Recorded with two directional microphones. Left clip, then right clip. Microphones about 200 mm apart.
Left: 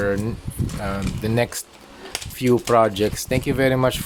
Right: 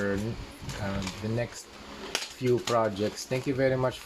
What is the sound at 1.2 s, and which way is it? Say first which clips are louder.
Speech: left 11 dB; 45° left (ahead or behind).